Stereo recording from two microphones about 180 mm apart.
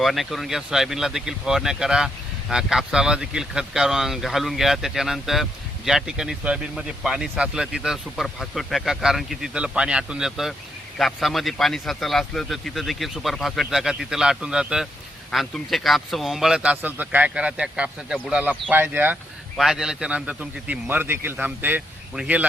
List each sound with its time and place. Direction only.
0.0 s a man's voice: centre (ahead or behind)